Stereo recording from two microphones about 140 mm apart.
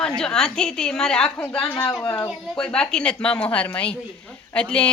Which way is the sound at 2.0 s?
30° left (ahead or behind).